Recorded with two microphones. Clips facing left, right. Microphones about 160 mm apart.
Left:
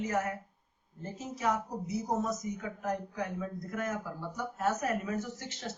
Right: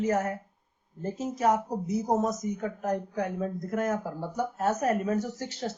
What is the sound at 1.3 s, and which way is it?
Speech, 40° right (ahead or behind).